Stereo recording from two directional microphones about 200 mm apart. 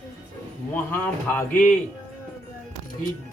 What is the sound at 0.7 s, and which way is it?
Speech, 10° left (ahead or behind).